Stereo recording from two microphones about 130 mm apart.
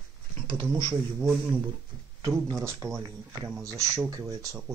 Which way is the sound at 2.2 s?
25° right (ahead or behind).